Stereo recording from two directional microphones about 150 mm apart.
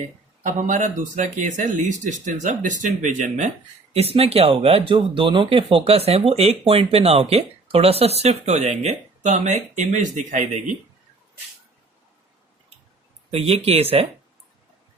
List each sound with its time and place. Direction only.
0.4 s speech: 55° right (ahead or behind)
3.9 s a man's voice: 40° right (ahead or behind)
13.3 s speech: 40° right (ahead or behind)